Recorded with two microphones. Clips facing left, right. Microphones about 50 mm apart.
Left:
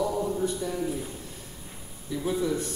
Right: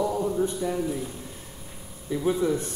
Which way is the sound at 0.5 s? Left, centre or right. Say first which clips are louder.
Right 4 dB; right.